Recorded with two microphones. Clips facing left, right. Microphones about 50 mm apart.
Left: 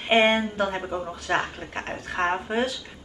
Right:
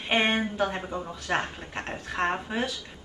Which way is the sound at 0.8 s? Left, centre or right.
Centre.